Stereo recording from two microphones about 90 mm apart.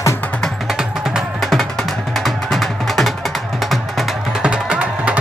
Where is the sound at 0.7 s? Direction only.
5° right (ahead or behind).